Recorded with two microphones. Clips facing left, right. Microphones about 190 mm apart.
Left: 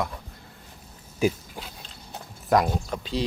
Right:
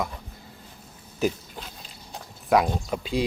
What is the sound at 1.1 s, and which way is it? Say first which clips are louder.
Pig: left 2 dB; 10° left (ahead or behind).